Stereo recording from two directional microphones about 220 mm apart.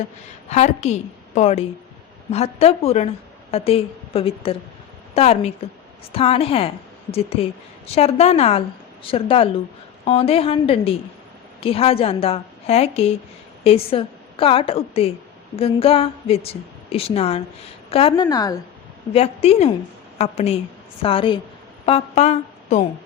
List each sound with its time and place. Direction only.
0.5 s a woman's voice: 30° left (ahead or behind)
19.1 s a woman's voice: 25° left (ahead or behind)